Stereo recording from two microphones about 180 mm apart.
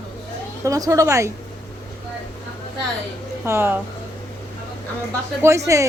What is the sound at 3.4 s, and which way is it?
Speech, 15° right (ahead or behind).